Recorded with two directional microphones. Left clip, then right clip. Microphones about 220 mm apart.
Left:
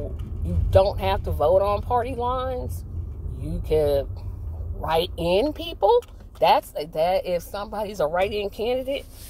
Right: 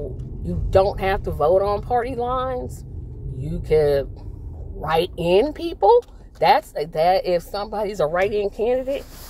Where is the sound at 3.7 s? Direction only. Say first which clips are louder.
Right 3 dB; 20° right (ahead or behind).